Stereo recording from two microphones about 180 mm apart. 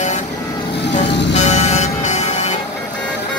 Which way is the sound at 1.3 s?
40° left (ahead or behind).